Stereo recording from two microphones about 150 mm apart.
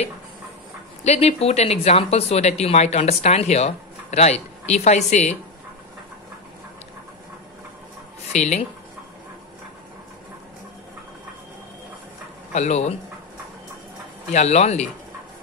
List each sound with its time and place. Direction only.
1.0 s speech: 45° left (ahead or behind)
8.3 s speech: 50° left (ahead or behind)
12.5 s speech: 50° left (ahead or behind)
14.3 s speech: 45° left (ahead or behind)